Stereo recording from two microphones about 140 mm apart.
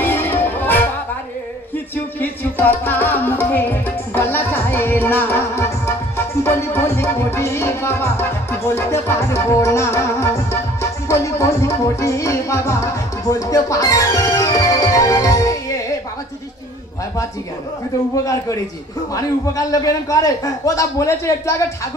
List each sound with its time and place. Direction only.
0.0 s music: 15° left (ahead or behind)
2.1 s music: 15° left (ahead or behind)
18.1 s a man's voice: 25° left (ahead or behind)